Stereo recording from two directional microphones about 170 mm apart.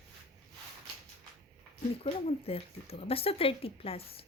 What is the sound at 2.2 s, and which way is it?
Speech, 35° left (ahead or behind).